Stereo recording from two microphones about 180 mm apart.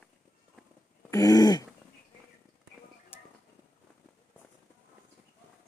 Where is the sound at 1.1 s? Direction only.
20° left (ahead or behind).